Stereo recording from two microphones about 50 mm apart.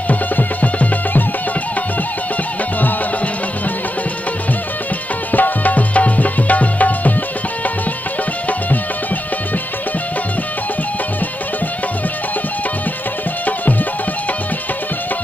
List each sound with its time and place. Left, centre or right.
0.1 s music: left
5.3 s music: left